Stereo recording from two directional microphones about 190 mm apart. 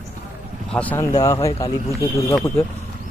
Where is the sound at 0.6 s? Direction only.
5° left (ahead or behind).